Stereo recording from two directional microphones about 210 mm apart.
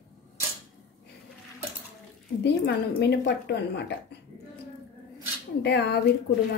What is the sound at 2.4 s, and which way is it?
A woman's voice, 55° left (ahead or behind).